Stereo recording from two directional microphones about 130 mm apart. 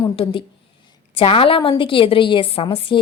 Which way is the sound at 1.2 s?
45° left (ahead or behind).